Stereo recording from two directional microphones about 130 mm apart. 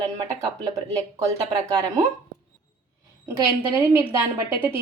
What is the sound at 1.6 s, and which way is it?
Speech, 25° right (ahead or behind).